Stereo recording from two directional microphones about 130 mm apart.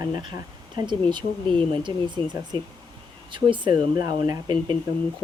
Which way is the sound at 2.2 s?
35° right (ahead or behind).